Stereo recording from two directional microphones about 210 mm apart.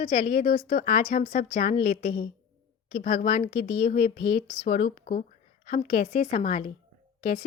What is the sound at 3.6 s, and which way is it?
Speech, 50° left (ahead or behind).